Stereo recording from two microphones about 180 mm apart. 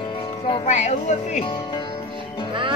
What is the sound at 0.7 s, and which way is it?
Speech, 40° left (ahead or behind).